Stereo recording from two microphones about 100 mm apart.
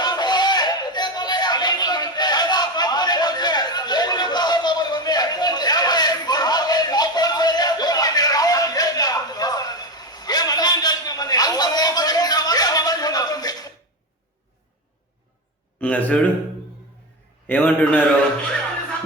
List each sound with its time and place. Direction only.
0.0 s a sound: 45° left (ahead or behind)
15.8 s speech: 15° left (ahead or behind)
17.4 s a man's voice: 20° left (ahead or behind)